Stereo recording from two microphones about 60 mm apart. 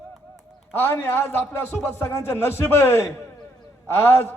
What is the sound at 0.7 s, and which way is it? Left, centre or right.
A man's voice, left.